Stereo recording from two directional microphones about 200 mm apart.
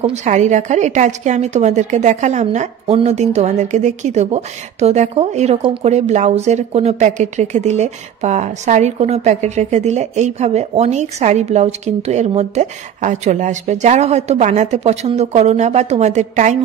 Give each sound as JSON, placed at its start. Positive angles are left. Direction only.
{"t": 0.0, "sound": "a woman's voice", "side_deg": -35}